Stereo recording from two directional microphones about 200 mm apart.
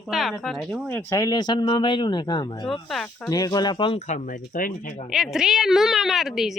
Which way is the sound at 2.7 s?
Centre (ahead or behind).